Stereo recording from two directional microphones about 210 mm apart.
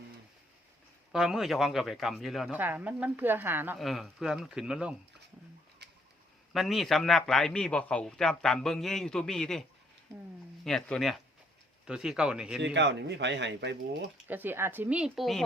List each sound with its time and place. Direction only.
1.1 s speech: centre (ahead or behind)
6.5 s speech: centre (ahead or behind)
12.5 s speech: 55° right (ahead or behind)
14.3 s speech: 10° right (ahead or behind)